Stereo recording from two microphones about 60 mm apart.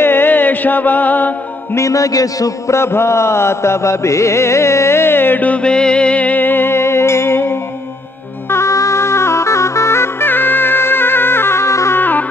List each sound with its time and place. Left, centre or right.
0.0 s music: left
1.8 s a man's voice: left
2.7 s music: left
8.5 s music: left
12.0 s music: left